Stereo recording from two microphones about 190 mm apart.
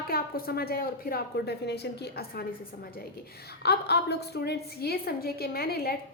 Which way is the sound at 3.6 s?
60° left (ahead or behind).